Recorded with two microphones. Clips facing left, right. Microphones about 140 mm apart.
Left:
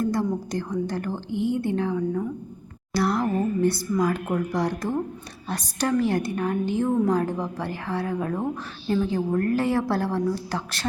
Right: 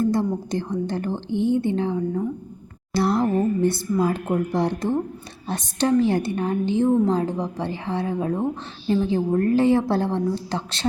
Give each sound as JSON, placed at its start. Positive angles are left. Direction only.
{"t": 0.5, "sound": "a woman's voice", "side_deg": -25}